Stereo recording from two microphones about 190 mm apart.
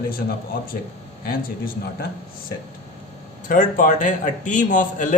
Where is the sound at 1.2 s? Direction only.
50° left (ahead or behind).